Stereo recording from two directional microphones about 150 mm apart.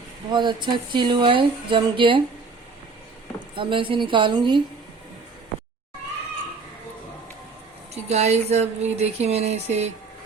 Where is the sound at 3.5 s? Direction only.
35° right (ahead or behind).